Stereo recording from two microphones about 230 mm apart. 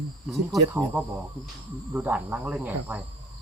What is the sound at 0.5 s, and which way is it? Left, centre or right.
Speech, centre.